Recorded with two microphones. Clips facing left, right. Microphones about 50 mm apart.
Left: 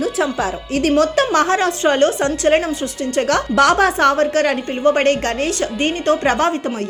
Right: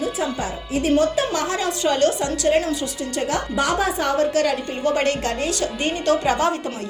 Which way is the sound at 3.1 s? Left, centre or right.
Left.